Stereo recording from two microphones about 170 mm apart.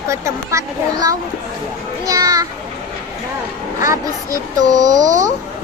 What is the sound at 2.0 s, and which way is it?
Children playing, 20° right (ahead or behind).